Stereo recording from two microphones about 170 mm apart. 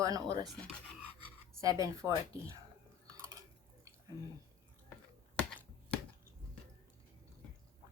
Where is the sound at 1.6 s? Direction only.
20° right (ahead or behind).